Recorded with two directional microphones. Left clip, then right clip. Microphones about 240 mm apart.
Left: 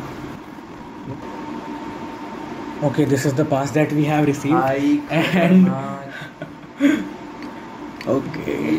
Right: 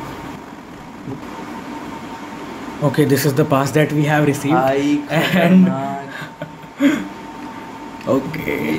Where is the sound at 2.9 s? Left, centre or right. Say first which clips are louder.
Right 4 dB; right.